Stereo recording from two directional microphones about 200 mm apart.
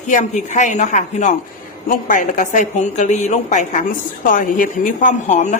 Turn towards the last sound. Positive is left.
turn(degrees=35)  # may be behind; listen again after turning